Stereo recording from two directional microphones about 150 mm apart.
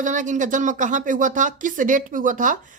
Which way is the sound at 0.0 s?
55° right (ahead or behind).